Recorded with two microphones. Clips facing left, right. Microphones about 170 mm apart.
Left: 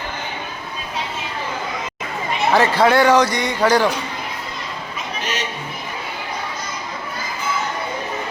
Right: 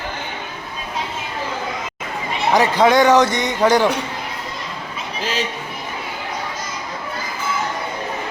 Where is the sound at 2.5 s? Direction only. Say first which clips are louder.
Right 1 dB; 15° right (ahead or behind).